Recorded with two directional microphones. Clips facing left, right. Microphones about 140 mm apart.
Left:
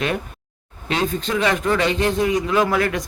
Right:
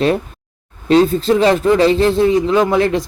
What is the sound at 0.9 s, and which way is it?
A man's voice, 35° right (ahead or behind).